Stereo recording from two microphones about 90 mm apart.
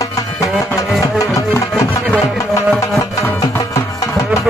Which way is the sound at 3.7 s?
35° left (ahead or behind).